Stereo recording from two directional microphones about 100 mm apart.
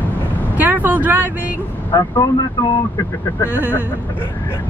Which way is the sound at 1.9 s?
35° left (ahead or behind).